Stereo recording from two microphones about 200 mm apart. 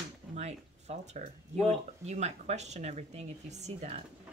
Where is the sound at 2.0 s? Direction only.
35° right (ahead or behind).